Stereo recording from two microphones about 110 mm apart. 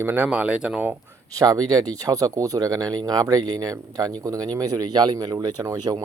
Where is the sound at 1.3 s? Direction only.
35° right (ahead or behind).